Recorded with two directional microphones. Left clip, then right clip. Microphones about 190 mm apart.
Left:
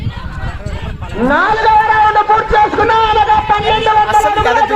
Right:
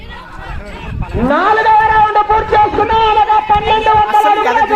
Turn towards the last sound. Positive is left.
turn(degrees=20)  # may be behind; listen again after turning